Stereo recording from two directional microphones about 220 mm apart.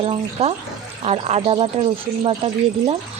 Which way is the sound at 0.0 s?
25° right (ahead or behind).